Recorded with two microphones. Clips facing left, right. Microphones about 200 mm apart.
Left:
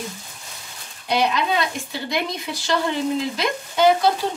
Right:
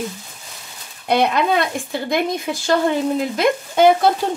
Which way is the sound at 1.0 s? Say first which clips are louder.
Right 4 dB; 55° right (ahead or behind).